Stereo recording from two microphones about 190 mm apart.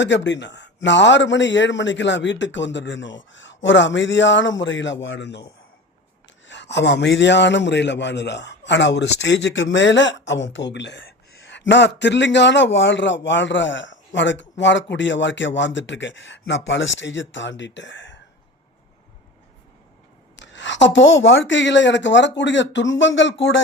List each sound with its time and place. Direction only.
0.0 s a man's voice: 70° left (ahead or behind)
6.5 s a man's voice: 65° left (ahead or behind)
20.4 s a man's voice: 70° left (ahead or behind)